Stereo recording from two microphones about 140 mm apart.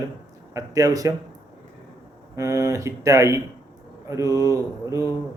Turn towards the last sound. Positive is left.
turn(degrees=-25)  # may be behind; listen again after turning